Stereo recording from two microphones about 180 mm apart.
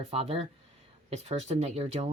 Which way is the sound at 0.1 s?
35° right (ahead or behind).